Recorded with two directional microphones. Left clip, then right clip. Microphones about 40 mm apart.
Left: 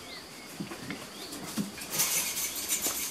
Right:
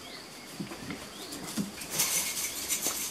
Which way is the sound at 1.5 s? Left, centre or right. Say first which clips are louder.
Even; right.